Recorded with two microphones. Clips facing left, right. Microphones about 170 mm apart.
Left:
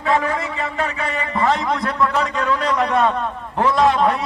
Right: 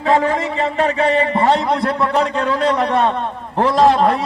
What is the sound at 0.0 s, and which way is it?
A man's voice, 30° right (ahead or behind).